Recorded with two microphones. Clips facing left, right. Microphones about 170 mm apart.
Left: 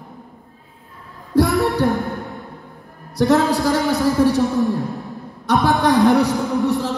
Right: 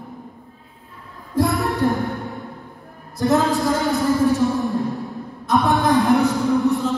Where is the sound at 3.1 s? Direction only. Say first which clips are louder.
Left 3 dB; 70° left (ahead or behind).